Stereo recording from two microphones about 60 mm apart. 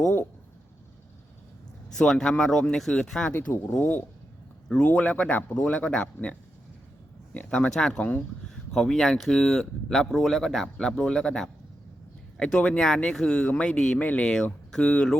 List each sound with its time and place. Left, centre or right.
2.0 s speech: centre
3.8 s speech: left
4.7 s speech: centre
7.3 s speech: left
7.7 s speech: centre